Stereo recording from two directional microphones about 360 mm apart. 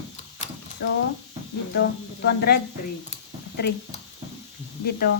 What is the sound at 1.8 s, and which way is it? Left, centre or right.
Speech, left.